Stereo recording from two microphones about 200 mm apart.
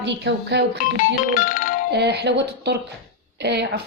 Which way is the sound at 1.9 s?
55° right (ahead or behind).